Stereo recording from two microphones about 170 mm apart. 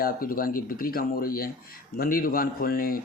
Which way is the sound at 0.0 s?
55° left (ahead or behind).